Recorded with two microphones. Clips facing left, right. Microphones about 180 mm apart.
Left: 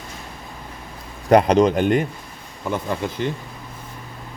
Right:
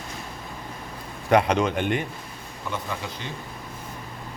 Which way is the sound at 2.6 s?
50° left (ahead or behind).